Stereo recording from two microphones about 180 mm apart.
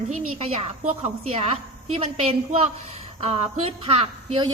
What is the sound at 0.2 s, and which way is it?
A woman's voice, 35° right (ahead or behind).